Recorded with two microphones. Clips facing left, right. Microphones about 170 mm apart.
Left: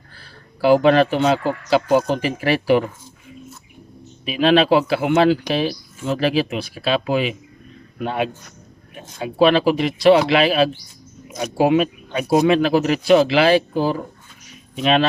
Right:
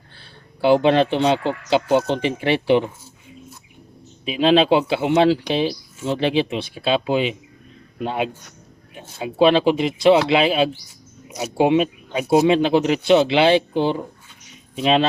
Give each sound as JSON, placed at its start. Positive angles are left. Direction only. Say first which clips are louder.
{"t": 0.2, "sound": "a sound", "louder": "left 1 dB", "side_deg": -25}
{"t": 1.1, "sound": "speech", "louder": "left 1 dB", "side_deg": -30}
{"t": 4.3, "sound": "speech", "louder": "even", "side_deg": -25}
{"t": 11.3, "sound": "speech", "louder": "left 2 dB", "side_deg": -10}
{"t": 11.5, "sound": "speech", "louder": "even", "side_deg": -25}